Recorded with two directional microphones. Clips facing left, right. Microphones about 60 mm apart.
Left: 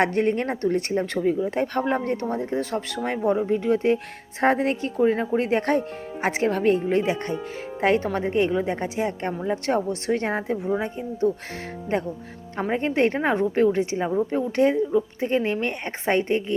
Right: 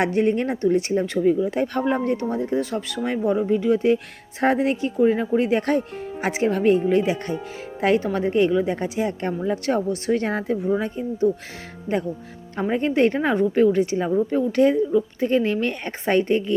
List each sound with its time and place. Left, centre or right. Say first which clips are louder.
0.0 s speech: right 1 dB; left
5.4 s speech: right 1 dB; left
11.2 s speech: right 2 dB; left
12.5 s speech: right 2 dB; left